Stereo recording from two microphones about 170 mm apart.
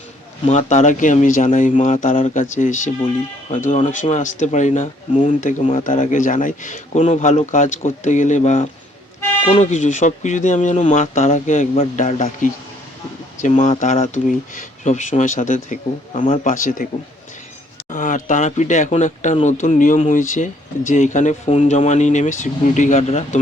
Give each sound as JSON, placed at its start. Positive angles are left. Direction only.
{"t": 0.4, "sound": "speech", "side_deg": 45}
{"t": 16.1, "sound": "speech", "side_deg": 40}
{"t": 17.9, "sound": "speech", "side_deg": 50}